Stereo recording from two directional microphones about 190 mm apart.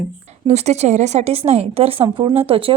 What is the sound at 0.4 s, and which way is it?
A woman's voice, 35° right (ahead or behind).